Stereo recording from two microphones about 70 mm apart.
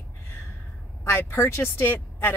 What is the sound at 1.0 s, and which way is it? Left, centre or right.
Speech, left.